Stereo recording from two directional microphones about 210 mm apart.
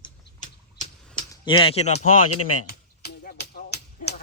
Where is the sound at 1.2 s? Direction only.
20° left (ahead or behind).